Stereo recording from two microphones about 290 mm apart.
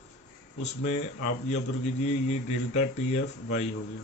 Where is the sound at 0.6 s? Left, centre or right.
Left.